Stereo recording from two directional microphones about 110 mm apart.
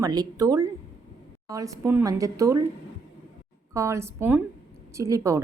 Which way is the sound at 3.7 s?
25° right (ahead or behind).